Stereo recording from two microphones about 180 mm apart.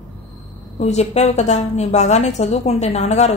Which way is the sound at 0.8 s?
40° left (ahead or behind).